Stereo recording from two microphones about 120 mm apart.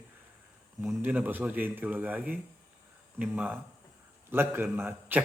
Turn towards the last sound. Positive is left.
turn(degrees=-20)  # may be behind; listen again after turning